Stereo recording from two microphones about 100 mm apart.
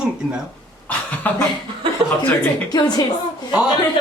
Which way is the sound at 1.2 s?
15° left (ahead or behind).